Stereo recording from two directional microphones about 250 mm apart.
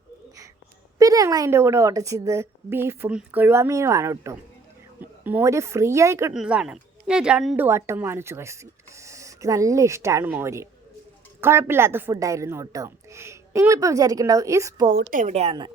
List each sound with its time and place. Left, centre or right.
0.9 s a woman's voice: centre
14.8 s a woman's voice: right